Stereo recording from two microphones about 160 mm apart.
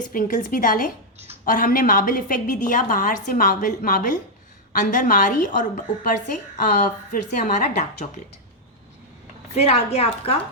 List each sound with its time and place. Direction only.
0.1 s a woman's voice: 60° left (ahead or behind)
9.6 s a woman's voice: 40° left (ahead or behind)